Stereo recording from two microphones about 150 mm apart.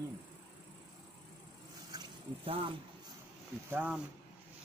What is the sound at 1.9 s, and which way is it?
Vehicle, 25° right (ahead or behind).